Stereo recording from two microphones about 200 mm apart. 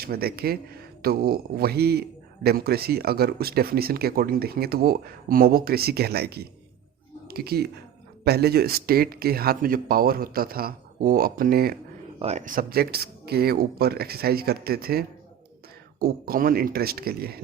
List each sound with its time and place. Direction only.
0.0 s speech: 50° right (ahead or behind)
12.2 s speech: 30° right (ahead or behind)
12.5 s speech: 50° right (ahead or behind)